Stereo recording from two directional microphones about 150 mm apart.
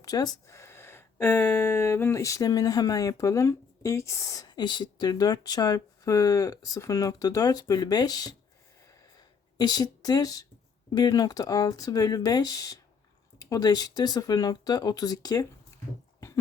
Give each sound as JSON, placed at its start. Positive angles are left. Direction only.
{"t": 0.0, "sound": "speech", "side_deg": 25}
{"t": 9.6, "sound": "speech", "side_deg": 25}